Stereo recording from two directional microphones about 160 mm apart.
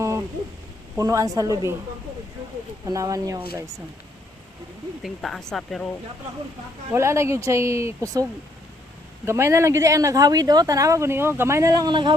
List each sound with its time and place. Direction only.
0.9 s speech: 20° right (ahead or behind)
2.8 s speech: 20° right (ahead or behind)
5.0 s speech: centre (ahead or behind)
6.9 s speech: 15° right (ahead or behind)
9.2 s speech: 15° right (ahead or behind)